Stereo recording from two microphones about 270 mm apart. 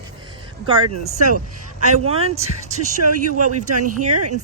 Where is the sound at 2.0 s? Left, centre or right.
Right.